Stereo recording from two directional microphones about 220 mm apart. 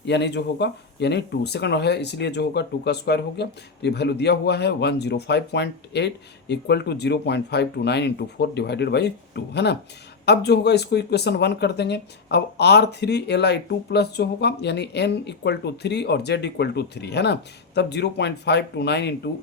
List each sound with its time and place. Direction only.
0.0 s speech: 50° left (ahead or behind)